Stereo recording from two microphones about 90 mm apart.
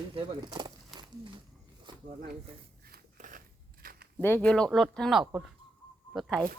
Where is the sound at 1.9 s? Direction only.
60° right (ahead or behind).